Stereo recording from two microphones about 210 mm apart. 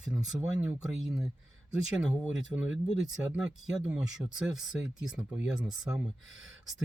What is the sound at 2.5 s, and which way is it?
Speech, 10° right (ahead or behind).